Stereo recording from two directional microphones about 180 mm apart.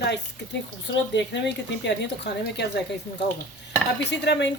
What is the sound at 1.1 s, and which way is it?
Speech, 75° left (ahead or behind).